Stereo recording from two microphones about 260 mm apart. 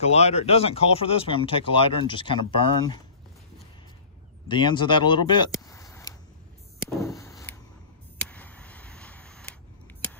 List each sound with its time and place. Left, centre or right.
0.0 s speech: left
4.5 s speech: centre
7.0 s a sound: centre